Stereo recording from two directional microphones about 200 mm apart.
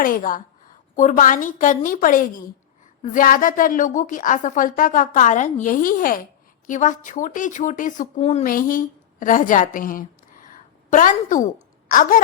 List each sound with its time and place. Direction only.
0.0 s a woman's voice: 45° left (ahead or behind)